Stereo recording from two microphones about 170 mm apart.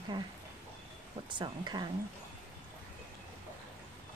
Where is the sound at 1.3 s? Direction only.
25° right (ahead or behind).